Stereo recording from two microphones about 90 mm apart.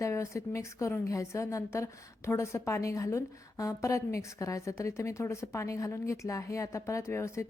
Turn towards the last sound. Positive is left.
turn(degrees=30)  # may be behind; listen again after turning